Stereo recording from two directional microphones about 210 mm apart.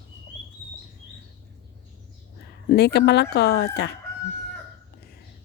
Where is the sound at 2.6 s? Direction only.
50° left (ahead or behind).